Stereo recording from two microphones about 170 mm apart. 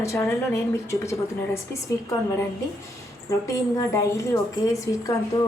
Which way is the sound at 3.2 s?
20° left (ahead or behind).